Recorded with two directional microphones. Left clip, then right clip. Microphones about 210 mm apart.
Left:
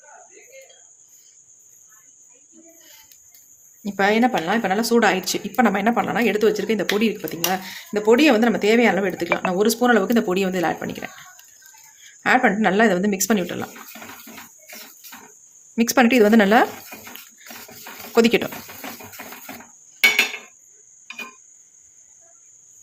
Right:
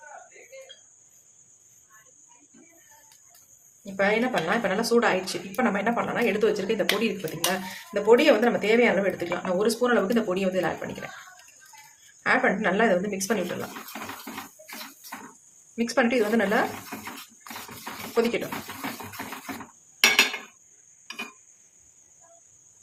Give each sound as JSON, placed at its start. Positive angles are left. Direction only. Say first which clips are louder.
{"t": 3.9, "sound": "speech", "louder": "left 5 dB", "side_deg": 50}
{"t": 12.2, "sound": "speech", "louder": "left 5 dB", "side_deg": 45}
{"t": 15.7, "sound": "speech", "louder": "left 6 dB", "side_deg": 50}
{"t": 18.1, "sound": "speech", "louder": "left 8 dB", "side_deg": 50}